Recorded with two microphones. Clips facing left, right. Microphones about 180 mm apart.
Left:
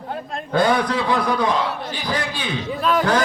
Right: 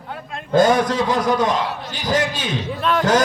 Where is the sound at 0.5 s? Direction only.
45° right (ahead or behind).